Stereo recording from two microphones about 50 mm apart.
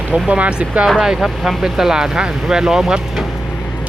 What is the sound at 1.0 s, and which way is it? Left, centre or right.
Speech, centre.